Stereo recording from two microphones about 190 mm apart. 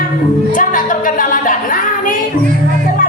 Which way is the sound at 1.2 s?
45° left (ahead or behind).